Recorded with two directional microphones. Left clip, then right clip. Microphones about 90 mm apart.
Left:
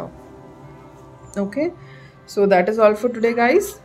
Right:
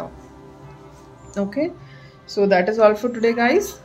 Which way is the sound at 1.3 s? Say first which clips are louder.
Left 1 dB; 25° left (ahead or behind).